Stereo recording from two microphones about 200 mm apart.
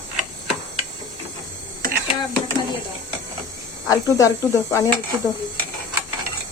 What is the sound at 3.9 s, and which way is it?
Speech, 15° left (ahead or behind).